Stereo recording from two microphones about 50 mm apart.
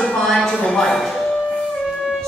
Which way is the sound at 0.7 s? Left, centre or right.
Centre.